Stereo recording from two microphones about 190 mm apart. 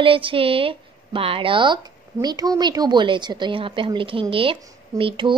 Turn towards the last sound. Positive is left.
turn(degrees=-25)  # may be behind; listen again after turning